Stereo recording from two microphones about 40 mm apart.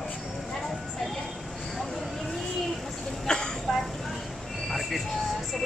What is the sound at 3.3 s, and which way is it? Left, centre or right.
Speech, left.